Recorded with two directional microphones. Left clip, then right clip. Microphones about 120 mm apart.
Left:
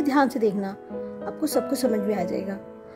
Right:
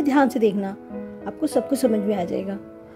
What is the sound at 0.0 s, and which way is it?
A woman's voice, 25° right (ahead or behind).